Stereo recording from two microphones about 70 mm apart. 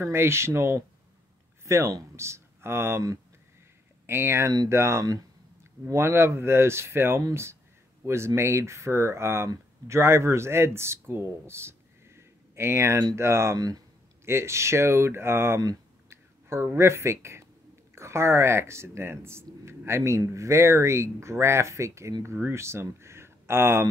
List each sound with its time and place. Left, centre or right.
0.0 s speech: right
1.6 s a sound: right
2.1 s speech: right
4.0 s speech: right
13.6 s speech: right
14.2 s speech: right